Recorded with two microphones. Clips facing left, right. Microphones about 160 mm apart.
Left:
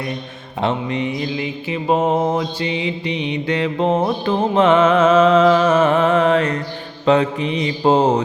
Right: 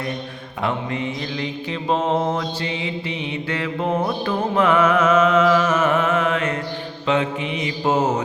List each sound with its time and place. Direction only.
0.6 s mantra: 20° left (ahead or behind)
4.3 s music: 25° left (ahead or behind)